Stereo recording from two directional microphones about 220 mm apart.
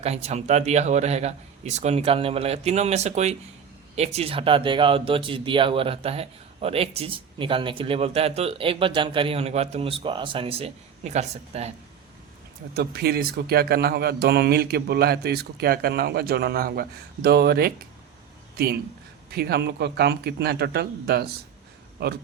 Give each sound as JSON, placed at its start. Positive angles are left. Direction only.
{"t": 0.0, "sound": "speech", "side_deg": -30}
{"t": 12.7, "sound": "speech", "side_deg": -45}